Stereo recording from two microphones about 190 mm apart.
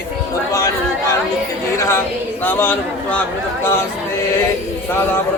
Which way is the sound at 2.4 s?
10° left (ahead or behind).